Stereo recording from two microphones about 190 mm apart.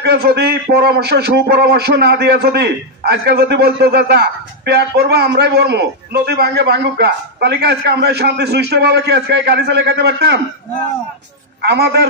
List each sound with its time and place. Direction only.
0.0 s a man's voice: 60° right (ahead or behind)
11.6 s a man's voice: 60° right (ahead or behind)